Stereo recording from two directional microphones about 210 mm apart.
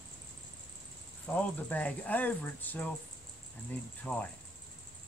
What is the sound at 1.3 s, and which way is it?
Speech, 5° left (ahead or behind).